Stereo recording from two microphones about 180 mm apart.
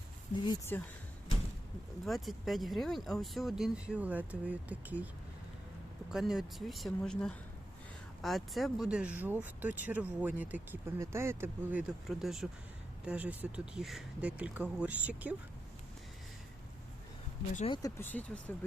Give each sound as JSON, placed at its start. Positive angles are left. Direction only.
{"t": 0.4, "sound": "speech", "side_deg": 15}
{"t": 2.0, "sound": "speech", "side_deg": 0}
{"t": 6.1, "sound": "speech", "side_deg": 0}
{"t": 17.7, "sound": "speech", "side_deg": 15}